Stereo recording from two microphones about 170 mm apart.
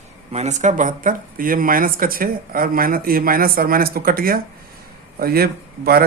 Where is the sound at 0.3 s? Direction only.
40° right (ahead or behind).